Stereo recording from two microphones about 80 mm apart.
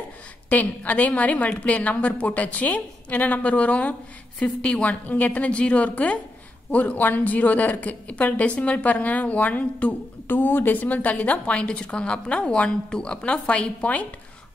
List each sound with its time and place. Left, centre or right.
0.5 s a woman's voice: centre